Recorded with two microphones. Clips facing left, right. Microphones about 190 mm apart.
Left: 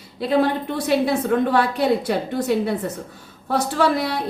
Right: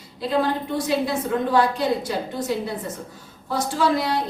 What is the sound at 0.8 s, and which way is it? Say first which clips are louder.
A woman's voice: left 6 dB; 65° left (ahead or behind).